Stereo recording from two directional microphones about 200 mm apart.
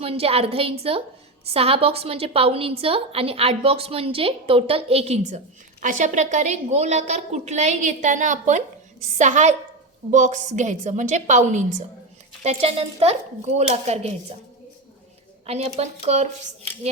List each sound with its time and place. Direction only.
0.0 s a woman's voice: 30° right (ahead or behind)
15.4 s a woman's voice: 30° right (ahead or behind)